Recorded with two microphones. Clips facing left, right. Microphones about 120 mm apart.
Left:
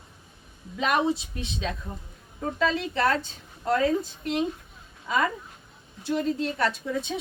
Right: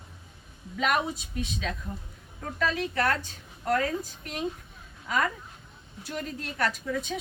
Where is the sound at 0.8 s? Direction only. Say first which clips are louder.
Left 3 dB; 25° left (ahead or behind).